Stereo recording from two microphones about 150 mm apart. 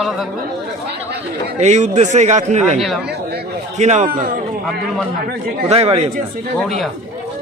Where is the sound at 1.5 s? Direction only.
50° right (ahead or behind).